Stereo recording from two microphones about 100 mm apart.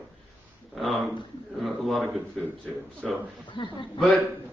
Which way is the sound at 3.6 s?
60° left (ahead or behind).